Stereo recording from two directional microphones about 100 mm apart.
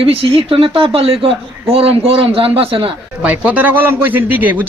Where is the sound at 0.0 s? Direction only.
75° right (ahead or behind).